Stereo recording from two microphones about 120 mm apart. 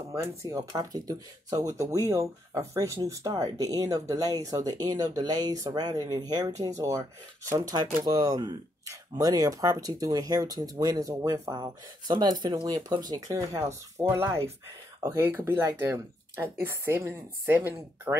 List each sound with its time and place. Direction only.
0.1 s speech: 25° right (ahead or behind)